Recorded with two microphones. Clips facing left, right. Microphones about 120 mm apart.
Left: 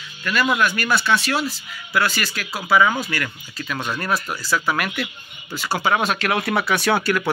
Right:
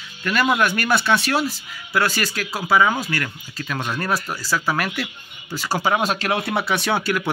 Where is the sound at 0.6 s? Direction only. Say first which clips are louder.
Right 1 dB; 55° right (ahead or behind).